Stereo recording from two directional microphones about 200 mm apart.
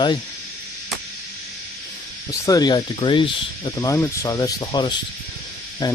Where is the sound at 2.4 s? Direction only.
20° left (ahead or behind).